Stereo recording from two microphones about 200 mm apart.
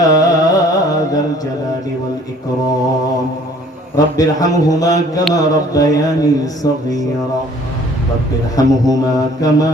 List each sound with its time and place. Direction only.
0.2 s carnatic music: 15° left (ahead or behind)
3.9 s mantra: 20° left (ahead or behind)
8.5 s mantra: 20° left (ahead or behind)